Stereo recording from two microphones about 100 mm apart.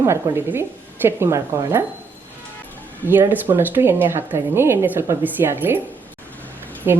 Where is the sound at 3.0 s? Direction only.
20° right (ahead or behind).